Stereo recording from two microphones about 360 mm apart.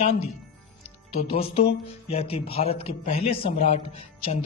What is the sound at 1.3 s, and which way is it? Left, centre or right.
A man's voice, centre.